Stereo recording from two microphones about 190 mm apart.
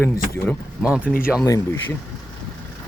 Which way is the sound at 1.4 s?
20° left (ahead or behind).